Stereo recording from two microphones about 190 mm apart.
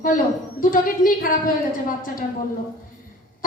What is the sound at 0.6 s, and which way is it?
Speech, 45° left (ahead or behind).